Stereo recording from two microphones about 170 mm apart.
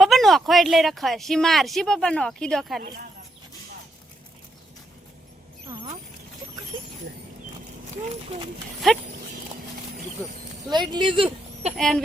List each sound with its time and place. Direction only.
0.0 s speech: centre (ahead or behind)
5.6 s rodents: 30° right (ahead or behind)
10.2 s speech: 10° left (ahead or behind)
10.7 s speech: 25° right (ahead or behind)
11.8 s speech: 5° left (ahead or behind)